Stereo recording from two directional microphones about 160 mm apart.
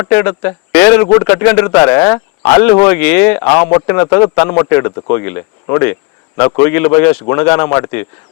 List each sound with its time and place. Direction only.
0.0 s a man's voice: 15° left (ahead or behind)